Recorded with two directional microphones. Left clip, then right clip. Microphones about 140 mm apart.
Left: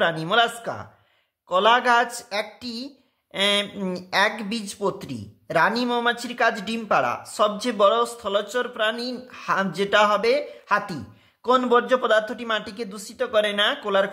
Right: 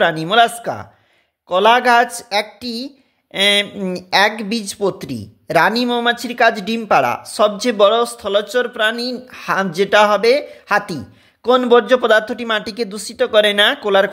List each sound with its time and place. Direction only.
0.0 s speech: 40° right (ahead or behind)